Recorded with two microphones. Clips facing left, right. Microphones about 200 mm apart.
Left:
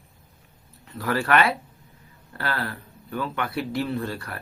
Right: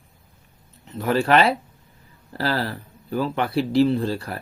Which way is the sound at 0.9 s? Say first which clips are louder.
Right 4 dB; 25° right (ahead or behind).